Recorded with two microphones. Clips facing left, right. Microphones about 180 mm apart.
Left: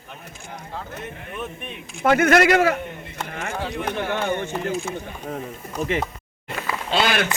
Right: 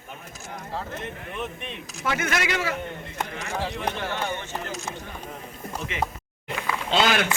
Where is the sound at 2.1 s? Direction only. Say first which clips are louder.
Left 11 dB; 60° left (ahead or behind).